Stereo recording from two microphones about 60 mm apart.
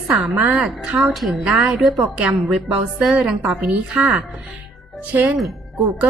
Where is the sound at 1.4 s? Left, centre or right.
Centre.